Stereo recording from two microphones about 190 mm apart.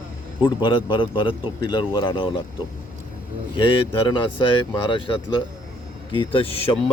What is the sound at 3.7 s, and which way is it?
Speech, 25° left (ahead or behind).